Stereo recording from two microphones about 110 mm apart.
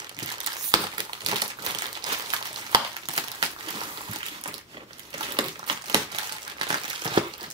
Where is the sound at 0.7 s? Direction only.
40° right (ahead or behind).